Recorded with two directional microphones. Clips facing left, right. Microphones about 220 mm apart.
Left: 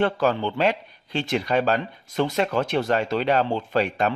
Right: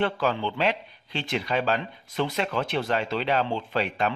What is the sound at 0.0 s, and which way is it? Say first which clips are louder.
Speech: left 4 dB; 45° left (ahead or behind).